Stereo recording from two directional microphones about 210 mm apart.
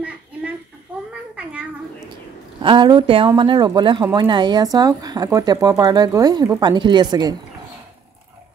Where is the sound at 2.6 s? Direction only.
20° right (ahead or behind).